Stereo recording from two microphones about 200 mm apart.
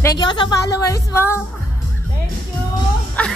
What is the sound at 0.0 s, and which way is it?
A woman's voice, 20° left (ahead or behind).